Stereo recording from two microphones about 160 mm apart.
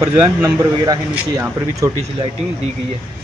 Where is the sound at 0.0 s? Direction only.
20° right (ahead or behind).